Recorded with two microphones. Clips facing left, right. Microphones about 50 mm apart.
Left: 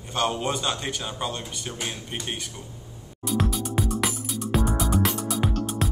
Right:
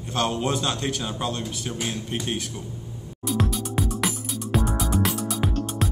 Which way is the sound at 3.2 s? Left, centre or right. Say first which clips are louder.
Even; centre.